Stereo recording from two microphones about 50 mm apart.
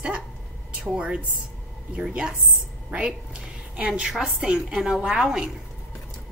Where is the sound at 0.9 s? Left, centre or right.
Right.